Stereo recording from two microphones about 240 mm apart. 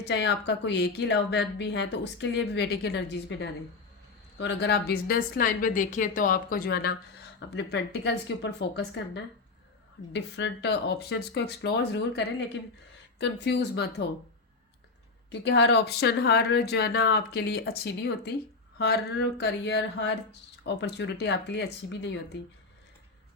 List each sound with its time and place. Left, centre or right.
0.0 s a woman's voice: left
15.3 s a woman's voice: left